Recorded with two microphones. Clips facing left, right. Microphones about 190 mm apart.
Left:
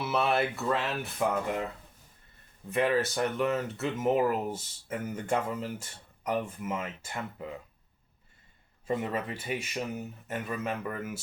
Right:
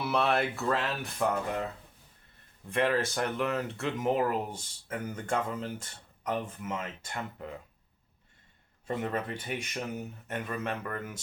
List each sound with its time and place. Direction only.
0.0 s speech: centre (ahead or behind)
2.6 s speech: 5° left (ahead or behind)
8.9 s speech: 5° left (ahead or behind)